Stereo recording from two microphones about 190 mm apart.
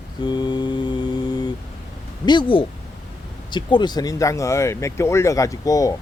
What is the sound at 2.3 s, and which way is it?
Speech, 25° left (ahead or behind).